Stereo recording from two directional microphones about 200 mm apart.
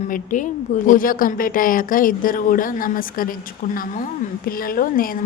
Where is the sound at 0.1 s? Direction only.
40° left (ahead or behind).